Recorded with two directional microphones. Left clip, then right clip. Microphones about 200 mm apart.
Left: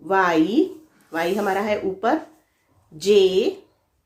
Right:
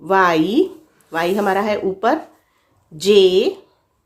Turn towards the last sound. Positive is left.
turn(degrees=-35)  # may be behind; listen again after turning